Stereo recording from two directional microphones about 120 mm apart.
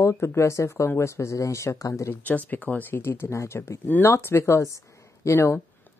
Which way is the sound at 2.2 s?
15° left (ahead or behind).